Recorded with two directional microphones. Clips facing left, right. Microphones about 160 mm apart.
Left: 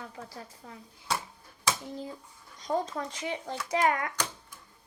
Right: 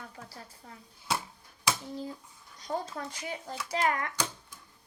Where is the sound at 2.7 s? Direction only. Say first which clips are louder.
Left 4 dB; 50° left (ahead or behind).